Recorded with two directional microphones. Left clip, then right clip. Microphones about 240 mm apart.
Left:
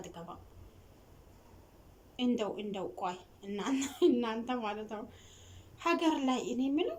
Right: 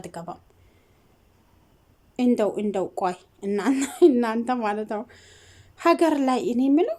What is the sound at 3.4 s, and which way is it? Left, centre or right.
Speech, right.